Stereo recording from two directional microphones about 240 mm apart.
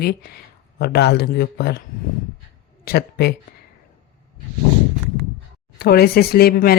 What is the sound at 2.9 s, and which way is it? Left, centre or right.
Speech, left.